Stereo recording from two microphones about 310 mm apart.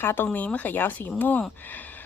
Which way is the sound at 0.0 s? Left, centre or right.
Centre.